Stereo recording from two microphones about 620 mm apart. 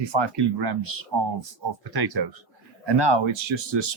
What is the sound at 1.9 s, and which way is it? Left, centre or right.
Speech, right.